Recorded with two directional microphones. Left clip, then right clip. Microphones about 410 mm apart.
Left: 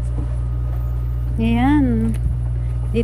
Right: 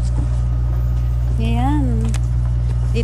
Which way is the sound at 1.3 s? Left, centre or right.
Centre.